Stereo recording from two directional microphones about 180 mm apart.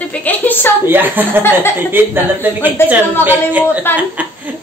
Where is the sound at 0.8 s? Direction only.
10° right (ahead or behind).